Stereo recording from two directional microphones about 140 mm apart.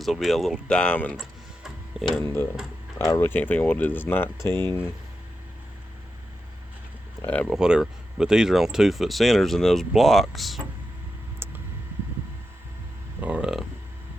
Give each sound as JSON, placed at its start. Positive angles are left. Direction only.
{"t": 0.0, "sound": "speech", "side_deg": 0}
{"t": 2.2, "sound": "speech", "side_deg": 20}
{"t": 7.2, "sound": "speech", "side_deg": 10}
{"t": 7.5, "sound": "speech", "side_deg": -5}
{"t": 11.4, "sound": "a sound", "side_deg": -15}
{"t": 13.1, "sound": "speech", "side_deg": -10}